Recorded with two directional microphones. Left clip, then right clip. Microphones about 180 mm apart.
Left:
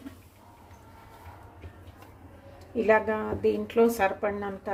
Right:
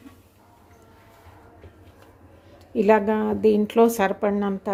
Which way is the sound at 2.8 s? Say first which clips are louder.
Right 5 dB; 45° right (ahead or behind).